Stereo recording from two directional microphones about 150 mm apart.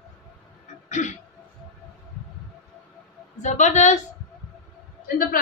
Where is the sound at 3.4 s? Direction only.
55° left (ahead or behind).